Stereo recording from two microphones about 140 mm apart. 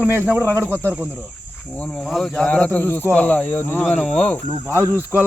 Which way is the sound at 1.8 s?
5° left (ahead or behind).